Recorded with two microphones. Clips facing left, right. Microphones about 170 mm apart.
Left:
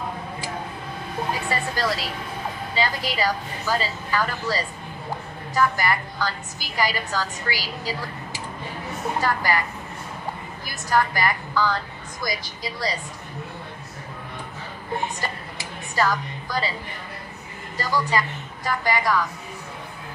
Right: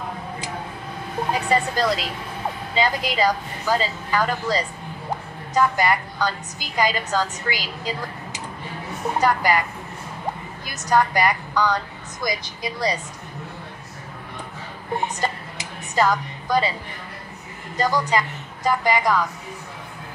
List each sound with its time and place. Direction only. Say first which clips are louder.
1.5 s a woman's voice: right 7 dB; 20° right (ahead or behind)
10.7 s a woman's voice: right 3 dB; 20° right (ahead or behind)
15.1 s a sound: right 5 dB; 20° right (ahead or behind)
17.7 s a woman's voice: right 3 dB; 20° right (ahead or behind)